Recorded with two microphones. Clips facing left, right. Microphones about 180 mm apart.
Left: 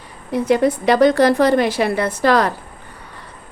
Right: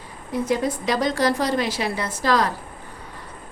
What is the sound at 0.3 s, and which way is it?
A woman's voice, 65° left (ahead or behind).